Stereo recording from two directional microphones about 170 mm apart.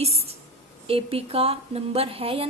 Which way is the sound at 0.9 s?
35° right (ahead or behind).